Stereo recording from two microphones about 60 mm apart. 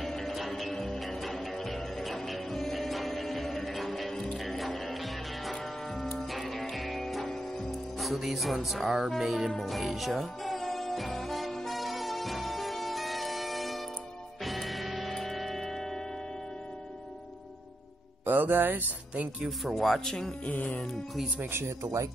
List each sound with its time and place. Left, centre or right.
0.0 s music: centre
9.1 s speech: centre
9.6 s music: centre
18.2 s speech: right
19.4 s speech: centre
20.4 s music: left
21.4 s speech: right